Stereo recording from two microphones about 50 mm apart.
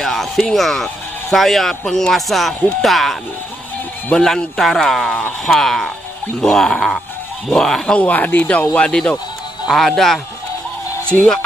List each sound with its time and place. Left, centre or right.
0.0 s speech: centre
4.1 s speech: left
4.6 s speech: centre
8.0 s speech: left
9.7 s speech: centre
11.1 s speech: left